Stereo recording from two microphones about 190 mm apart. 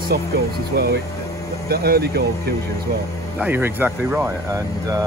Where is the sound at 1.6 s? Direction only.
55° right (ahead or behind).